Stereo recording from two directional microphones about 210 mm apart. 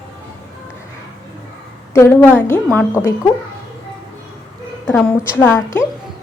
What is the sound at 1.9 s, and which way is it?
A woman's voice, 10° left (ahead or behind).